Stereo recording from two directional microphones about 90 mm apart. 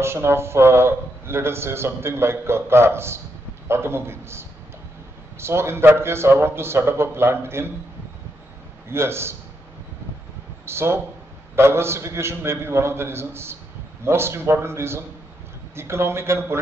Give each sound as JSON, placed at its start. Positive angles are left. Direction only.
{"t": 0.0, "sound": "a man's voice", "side_deg": -30}
{"t": 8.8, "sound": "a man's voice", "side_deg": -30}
{"t": 10.6, "sound": "a man's voice", "side_deg": -30}